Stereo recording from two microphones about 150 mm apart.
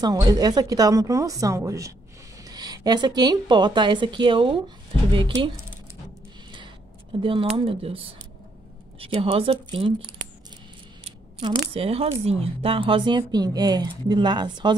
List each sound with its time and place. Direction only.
0.0 s speech: 25° right (ahead or behind)
7.2 s speech: 35° right (ahead or behind)